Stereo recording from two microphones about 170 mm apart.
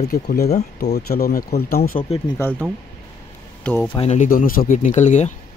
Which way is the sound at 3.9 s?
35° left (ahead or behind).